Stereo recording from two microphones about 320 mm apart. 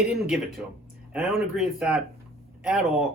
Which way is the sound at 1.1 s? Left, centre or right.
Centre.